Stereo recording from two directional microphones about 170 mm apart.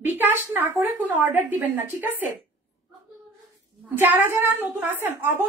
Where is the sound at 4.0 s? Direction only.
15° right (ahead or behind).